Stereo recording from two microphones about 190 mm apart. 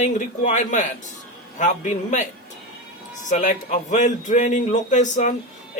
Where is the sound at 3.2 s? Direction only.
40° left (ahead or behind).